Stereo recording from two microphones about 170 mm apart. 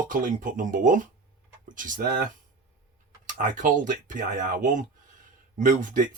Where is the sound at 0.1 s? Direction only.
50° right (ahead or behind).